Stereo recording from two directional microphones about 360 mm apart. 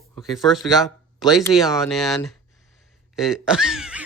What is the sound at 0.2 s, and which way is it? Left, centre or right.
Speech, centre.